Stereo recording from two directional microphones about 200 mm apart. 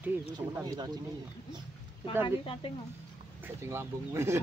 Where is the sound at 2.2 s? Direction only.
25° left (ahead or behind).